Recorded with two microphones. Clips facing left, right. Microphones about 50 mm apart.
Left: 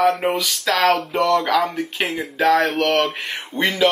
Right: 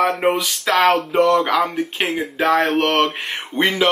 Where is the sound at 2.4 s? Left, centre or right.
Right.